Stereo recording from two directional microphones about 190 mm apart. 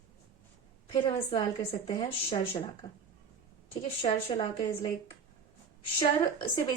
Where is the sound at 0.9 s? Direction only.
30° left (ahead or behind).